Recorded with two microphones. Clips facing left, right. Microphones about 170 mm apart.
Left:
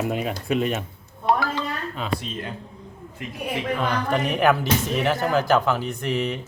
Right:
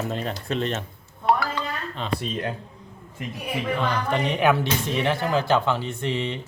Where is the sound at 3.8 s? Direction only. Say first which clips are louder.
Left 1 dB; 5° left (ahead or behind).